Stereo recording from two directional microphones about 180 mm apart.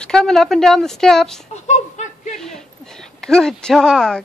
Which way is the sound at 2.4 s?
5° left (ahead or behind).